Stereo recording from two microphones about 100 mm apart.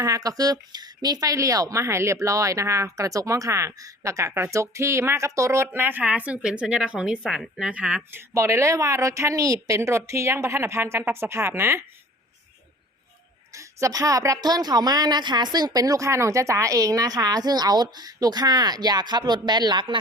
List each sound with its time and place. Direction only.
0.0 s a woman's voice: 35° right (ahead or behind); by 8.0 s 15° right (ahead or behind)
8.1 s a woman's voice: 30° right (ahead or behind)
13.6 s a woman's voice: 30° right (ahead or behind); by 20.0 s 50° right (ahead or behind)